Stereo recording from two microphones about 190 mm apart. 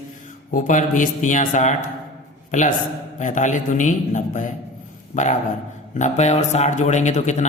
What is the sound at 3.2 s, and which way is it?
Speech, 40° left (ahead or behind).